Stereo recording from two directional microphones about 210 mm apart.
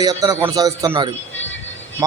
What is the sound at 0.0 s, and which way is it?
Speech, 20° right (ahead or behind).